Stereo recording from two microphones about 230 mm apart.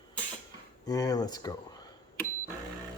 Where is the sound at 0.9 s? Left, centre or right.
Centre.